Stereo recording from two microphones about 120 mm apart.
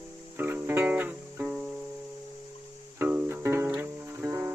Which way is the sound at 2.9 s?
15° right (ahead or behind).